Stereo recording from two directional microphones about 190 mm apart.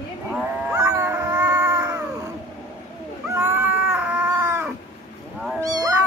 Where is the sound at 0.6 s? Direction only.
15° right (ahead or behind).